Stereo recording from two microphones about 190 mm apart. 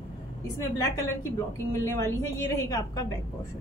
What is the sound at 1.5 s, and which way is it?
A woman's voice, 15° left (ahead or behind).